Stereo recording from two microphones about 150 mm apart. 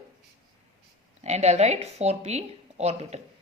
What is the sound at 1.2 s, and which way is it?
Speech, 45° right (ahead or behind).